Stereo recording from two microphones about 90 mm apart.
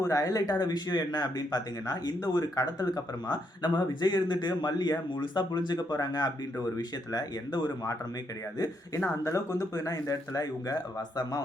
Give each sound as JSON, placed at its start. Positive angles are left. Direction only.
{"t": 0.0, "sound": "speech", "side_deg": 35}
{"t": 9.2, "sound": "speech", "side_deg": 35}